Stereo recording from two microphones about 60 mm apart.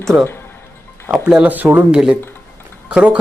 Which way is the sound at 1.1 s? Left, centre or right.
Centre.